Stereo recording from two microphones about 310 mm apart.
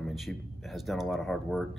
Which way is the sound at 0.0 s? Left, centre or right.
Centre.